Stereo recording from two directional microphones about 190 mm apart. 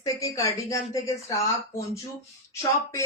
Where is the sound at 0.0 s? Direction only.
15° left (ahead or behind).